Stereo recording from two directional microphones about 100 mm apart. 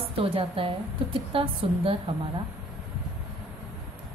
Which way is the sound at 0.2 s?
65° right (ahead or behind).